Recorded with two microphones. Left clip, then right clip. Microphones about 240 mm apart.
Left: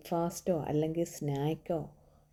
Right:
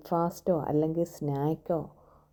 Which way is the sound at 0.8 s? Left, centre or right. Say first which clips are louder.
Right 4 dB; centre.